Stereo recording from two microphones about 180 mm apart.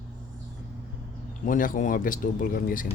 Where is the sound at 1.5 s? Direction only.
45° left (ahead or behind).